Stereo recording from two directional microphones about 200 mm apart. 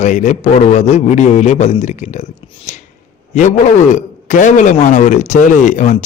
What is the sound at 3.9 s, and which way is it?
Speech, 40° left (ahead or behind).